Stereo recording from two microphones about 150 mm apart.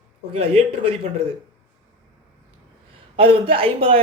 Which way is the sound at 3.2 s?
35° right (ahead or behind).